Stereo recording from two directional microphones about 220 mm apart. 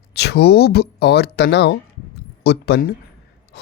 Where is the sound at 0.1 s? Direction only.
50° left (ahead or behind).